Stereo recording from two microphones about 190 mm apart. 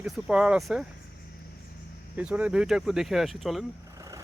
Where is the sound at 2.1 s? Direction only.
5° right (ahead or behind).